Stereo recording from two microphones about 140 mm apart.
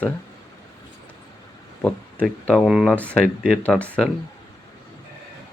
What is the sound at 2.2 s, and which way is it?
Speech, 5° left (ahead or behind).